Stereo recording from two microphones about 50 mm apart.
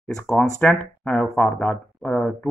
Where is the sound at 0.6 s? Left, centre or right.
Left.